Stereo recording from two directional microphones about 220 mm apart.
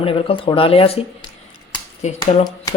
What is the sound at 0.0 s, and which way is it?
Speech, 25° left (ahead or behind).